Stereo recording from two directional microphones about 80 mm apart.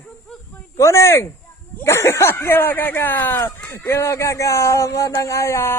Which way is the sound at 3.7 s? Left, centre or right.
Left.